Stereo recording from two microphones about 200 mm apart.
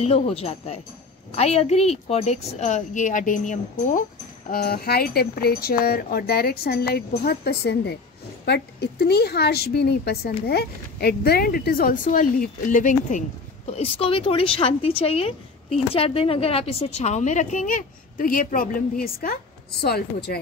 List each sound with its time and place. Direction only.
0.0 s a woman's voice: 30° left (ahead or behind)
13.7 s a woman's voice: 30° left (ahead or behind); by 20.3 s 50° left (ahead or behind)